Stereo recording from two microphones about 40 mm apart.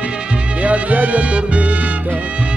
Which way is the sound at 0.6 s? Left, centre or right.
Right.